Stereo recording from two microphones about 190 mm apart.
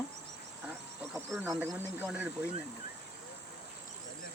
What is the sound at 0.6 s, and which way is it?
Wild animals, 10° right (ahead or behind).